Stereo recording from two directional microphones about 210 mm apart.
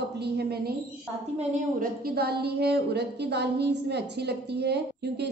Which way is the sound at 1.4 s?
40° right (ahead or behind).